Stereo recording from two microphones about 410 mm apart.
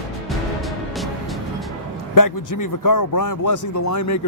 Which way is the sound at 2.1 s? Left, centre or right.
Left.